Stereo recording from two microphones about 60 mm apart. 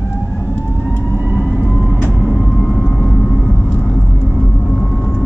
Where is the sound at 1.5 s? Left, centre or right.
Centre.